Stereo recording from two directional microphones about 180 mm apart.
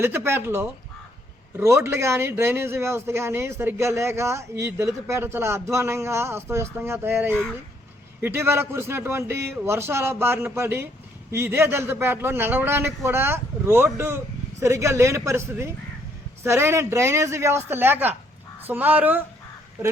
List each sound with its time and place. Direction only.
0.0 s speech: 15° right (ahead or behind)